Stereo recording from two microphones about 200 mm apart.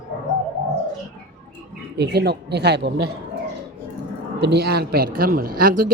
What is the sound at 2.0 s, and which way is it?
Speech, 55° right (ahead or behind).